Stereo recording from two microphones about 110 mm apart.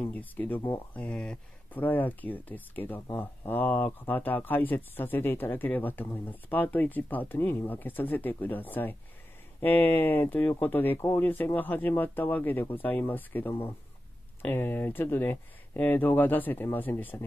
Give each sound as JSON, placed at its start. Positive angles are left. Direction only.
{"t": 0.0, "sound": "speech", "side_deg": 15}